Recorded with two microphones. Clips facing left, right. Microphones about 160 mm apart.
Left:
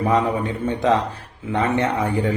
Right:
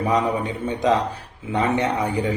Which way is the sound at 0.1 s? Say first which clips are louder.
Left 1 dB; 15° right (ahead or behind).